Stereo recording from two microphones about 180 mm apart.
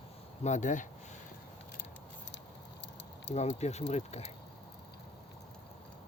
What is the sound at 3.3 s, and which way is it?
Speech, 40° left (ahead or behind).